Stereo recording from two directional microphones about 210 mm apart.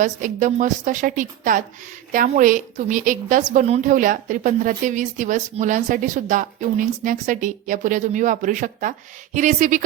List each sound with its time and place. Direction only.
0.0 s a woman's voice: 35° right (ahead or behind)